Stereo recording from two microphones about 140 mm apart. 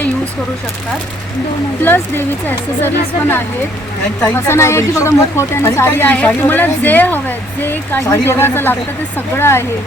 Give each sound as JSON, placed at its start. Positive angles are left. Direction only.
{"t": 1.8, "sound": "a woman's voice", "side_deg": 15}